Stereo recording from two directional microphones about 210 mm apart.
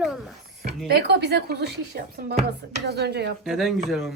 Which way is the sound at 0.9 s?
50° right (ahead or behind).